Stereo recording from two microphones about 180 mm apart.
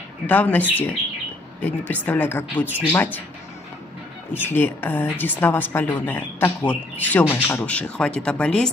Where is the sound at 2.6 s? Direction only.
10° right (ahead or behind).